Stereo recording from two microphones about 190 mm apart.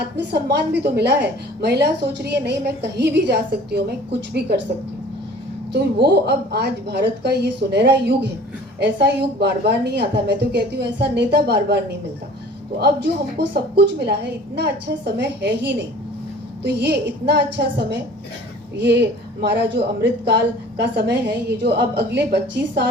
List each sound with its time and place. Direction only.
0.2 s a woman's voice: 65° right (ahead or behind)
5.7 s a woman's voice: 60° right (ahead or behind)
12.8 s a woman's voice: 65° right (ahead or behind)